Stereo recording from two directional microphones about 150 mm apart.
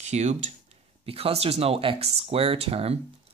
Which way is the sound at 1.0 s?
40° right (ahead or behind).